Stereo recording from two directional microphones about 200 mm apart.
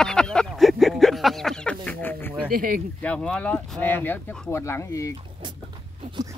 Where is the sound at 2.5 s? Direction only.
45° right (ahead or behind).